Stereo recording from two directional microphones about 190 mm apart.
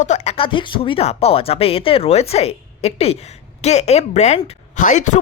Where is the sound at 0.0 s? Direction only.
35° left (ahead or behind).